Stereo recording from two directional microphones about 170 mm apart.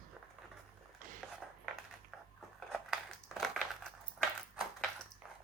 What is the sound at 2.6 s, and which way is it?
Crumpling, centre (ahead or behind).